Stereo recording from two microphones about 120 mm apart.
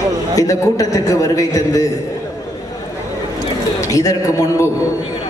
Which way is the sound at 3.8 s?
30° left (ahead or behind).